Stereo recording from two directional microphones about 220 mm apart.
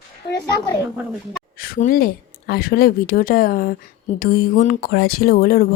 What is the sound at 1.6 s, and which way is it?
Speech, 40° left (ahead or behind).